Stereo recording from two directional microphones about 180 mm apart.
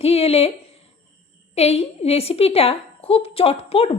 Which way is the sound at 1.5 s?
35° left (ahead or behind).